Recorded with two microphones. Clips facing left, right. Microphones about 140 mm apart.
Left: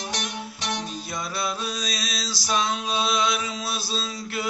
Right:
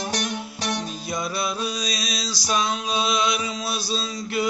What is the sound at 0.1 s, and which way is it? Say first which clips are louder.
Music: right 4 dB; 45° right (ahead or behind).